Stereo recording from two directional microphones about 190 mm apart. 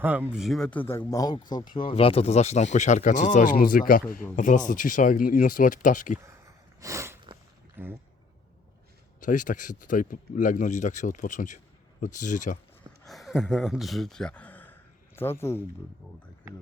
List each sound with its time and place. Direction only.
0.0 s speech: 10° right (ahead or behind); by 6.1 s 40° left (ahead or behind)
6.2 s a sound: 15° right (ahead or behind)
7.8 s speech: 10° right (ahead or behind)
9.2 s speech: 40° left (ahead or behind)
13.1 s speech: centre (ahead or behind)